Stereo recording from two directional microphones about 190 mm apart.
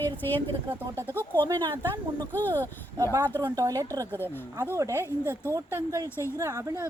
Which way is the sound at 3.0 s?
20° right (ahead or behind).